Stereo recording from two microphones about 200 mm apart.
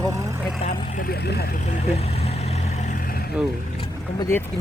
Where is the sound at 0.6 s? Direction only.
50° left (ahead or behind).